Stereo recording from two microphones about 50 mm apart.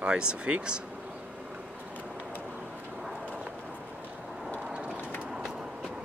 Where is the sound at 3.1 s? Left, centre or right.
Right.